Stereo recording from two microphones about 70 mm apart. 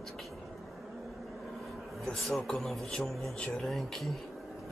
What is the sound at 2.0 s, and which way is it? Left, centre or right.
A man's voice, centre.